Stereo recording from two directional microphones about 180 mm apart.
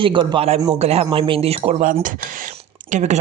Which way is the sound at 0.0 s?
25° right (ahead or behind).